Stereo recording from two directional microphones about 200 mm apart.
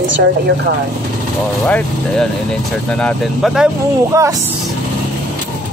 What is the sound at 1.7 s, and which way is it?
Speech, 5° left (ahead or behind).